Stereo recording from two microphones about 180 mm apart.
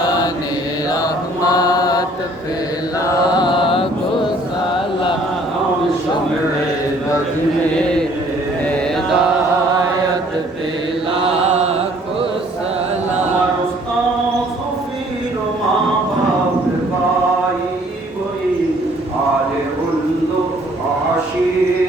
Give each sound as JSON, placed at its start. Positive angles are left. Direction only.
{"t": 0.9, "sound": "mantra", "side_deg": 20}
{"t": 7.8, "sound": "a sound", "side_deg": 5}
{"t": 8.6, "sound": "mantra", "side_deg": 5}
{"t": 11.1, "sound": "mantra", "side_deg": -30}